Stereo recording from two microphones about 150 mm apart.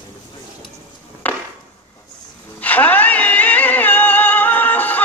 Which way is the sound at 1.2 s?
10° left (ahead or behind).